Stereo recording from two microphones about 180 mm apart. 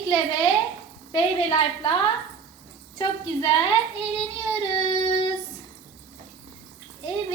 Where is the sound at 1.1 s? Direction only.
35° left (ahead or behind).